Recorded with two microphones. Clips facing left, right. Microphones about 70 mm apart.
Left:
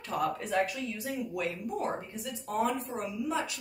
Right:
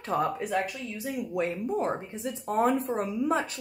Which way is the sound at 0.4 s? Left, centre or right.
Centre.